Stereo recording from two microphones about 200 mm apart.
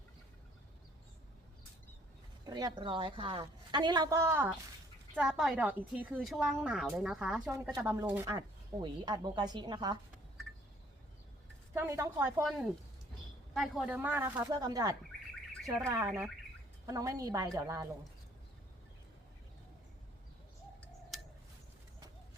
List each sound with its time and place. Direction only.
2.4 s a woman's voice: 20° right (ahead or behind); by 7.5 s 5° right (ahead or behind)
7.5 s speech: 15° right (ahead or behind)
11.7 s speech: 15° right (ahead or behind)
13.5 s speech: centre (ahead or behind); by 17.8 s 15° right (ahead or behind)
21.1 s a sound: centre (ahead or behind)